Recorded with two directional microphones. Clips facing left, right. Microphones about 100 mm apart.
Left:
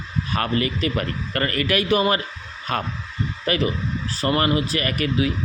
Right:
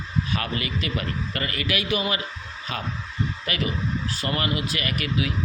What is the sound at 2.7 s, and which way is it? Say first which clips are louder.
Speech: left 7 dB; 50° left (ahead or behind).